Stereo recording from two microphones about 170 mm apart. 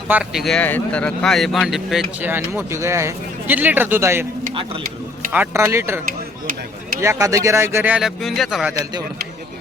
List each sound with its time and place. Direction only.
0.1 s speech: 5° right (ahead or behind)
5.3 s speech: 10° right (ahead or behind)
7.0 s speech: 20° right (ahead or behind); by 8.7 s centre (ahead or behind)
8.8 s speech: 25° right (ahead or behind)